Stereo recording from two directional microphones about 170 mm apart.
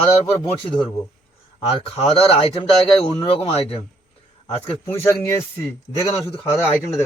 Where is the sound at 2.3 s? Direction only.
35° left (ahead or behind).